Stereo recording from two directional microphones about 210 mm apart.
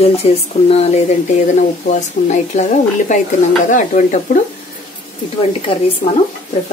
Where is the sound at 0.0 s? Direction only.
30° left (ahead or behind).